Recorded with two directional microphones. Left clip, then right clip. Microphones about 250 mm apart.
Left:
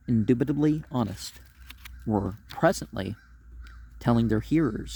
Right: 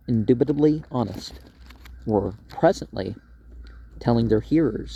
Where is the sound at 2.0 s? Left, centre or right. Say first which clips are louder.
Right 6 dB; left.